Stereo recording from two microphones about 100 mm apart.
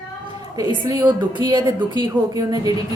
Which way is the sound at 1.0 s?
50° right (ahead or behind).